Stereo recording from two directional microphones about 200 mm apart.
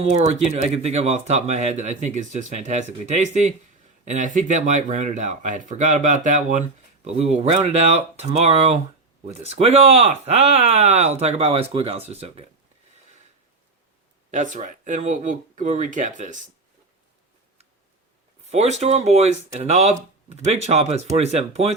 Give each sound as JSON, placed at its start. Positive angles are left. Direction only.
{"t": 0.0, "sound": "speech", "side_deg": -35}
{"t": 14.3, "sound": "speech", "side_deg": -35}
{"t": 18.5, "sound": "speech", "side_deg": -35}